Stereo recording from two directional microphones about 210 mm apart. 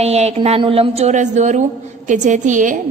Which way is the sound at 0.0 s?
30° right (ahead or behind).